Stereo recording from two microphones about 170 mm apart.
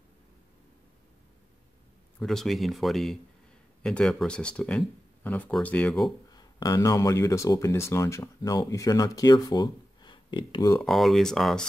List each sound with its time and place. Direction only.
2.1 s speech: centre (ahead or behind)
6.3 s speech: 25° left (ahead or behind)
10.8 s speech: centre (ahead or behind)